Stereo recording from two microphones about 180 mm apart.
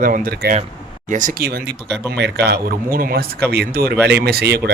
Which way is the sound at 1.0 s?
45° right (ahead or behind).